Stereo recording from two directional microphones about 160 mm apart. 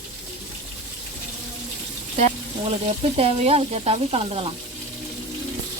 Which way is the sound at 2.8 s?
40° right (ahead or behind).